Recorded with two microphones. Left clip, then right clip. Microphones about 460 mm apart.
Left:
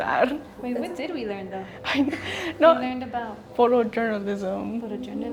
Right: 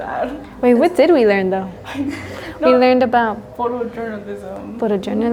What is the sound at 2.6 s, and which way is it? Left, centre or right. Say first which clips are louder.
Speech: right 8 dB; right.